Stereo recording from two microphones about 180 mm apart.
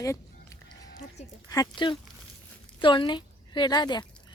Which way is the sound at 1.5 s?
25° left (ahead or behind).